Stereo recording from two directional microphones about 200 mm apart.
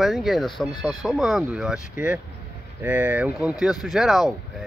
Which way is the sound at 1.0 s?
Centre (ahead or behind).